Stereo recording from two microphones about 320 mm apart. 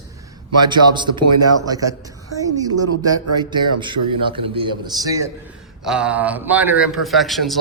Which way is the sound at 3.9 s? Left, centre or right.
Right.